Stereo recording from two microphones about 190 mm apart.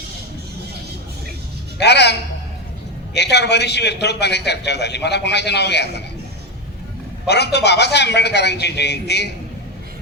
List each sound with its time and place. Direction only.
1.8 s a man's voice: 60° left (ahead or behind)
3.2 s a man's voice: 60° left (ahead or behind)
7.3 s a man's voice: 60° left (ahead or behind)